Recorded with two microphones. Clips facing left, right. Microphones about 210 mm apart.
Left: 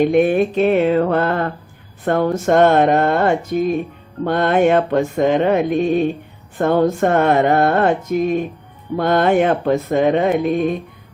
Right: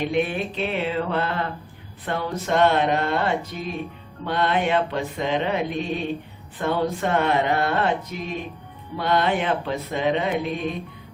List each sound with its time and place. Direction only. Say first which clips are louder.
0.0 s music: left 10 dB; 50° left (ahead or behind)